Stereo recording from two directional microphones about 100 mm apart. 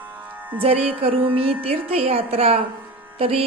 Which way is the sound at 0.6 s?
75° right (ahead or behind).